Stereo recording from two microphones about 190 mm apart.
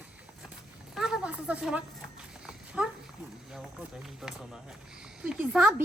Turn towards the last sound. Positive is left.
turn(degrees=-5)  # may be behind; listen again after turning